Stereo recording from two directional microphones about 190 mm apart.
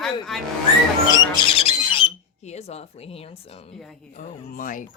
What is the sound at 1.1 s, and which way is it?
Squawk, 30° left (ahead or behind).